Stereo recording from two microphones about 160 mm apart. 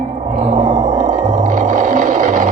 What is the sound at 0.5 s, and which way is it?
Music, 50° right (ahead or behind).